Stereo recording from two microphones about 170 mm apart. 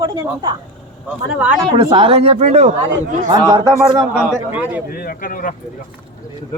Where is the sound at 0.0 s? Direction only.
25° right (ahead or behind).